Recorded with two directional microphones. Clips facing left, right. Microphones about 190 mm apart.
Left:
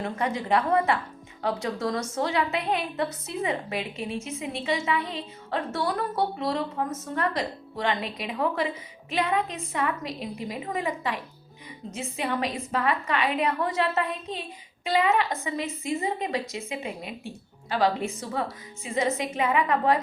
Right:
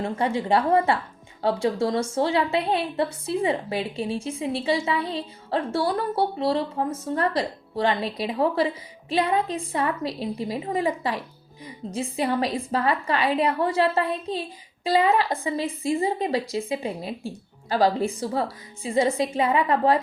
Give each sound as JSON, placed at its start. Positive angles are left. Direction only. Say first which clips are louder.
{"t": 0.0, "sound": "a woman's voice", "louder": "right 4 dB", "side_deg": -30}